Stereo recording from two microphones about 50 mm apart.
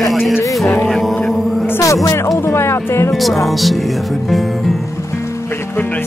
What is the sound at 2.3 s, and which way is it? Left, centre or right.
Music, left.